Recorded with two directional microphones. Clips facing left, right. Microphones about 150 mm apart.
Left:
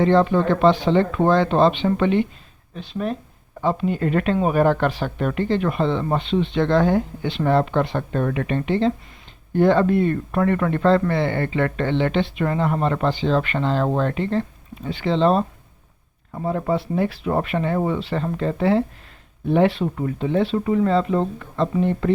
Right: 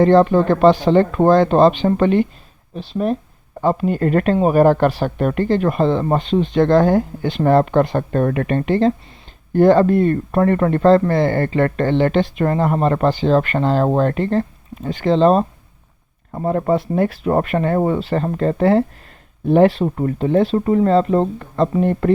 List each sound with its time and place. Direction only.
0.0 s speech: 45° right (ahead or behind)